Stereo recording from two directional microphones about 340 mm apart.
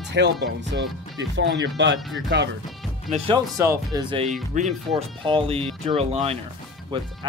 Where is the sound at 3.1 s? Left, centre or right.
Centre.